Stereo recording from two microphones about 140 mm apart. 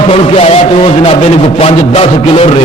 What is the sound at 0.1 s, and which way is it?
A man's voice, 45° left (ahead or behind).